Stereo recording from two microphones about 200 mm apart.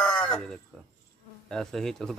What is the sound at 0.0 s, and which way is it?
Chicken, 5° left (ahead or behind).